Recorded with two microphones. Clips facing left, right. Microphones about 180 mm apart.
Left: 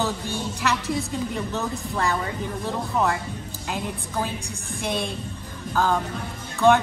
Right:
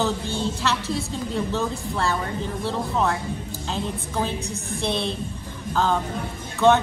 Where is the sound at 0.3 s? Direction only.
15° left (ahead or behind).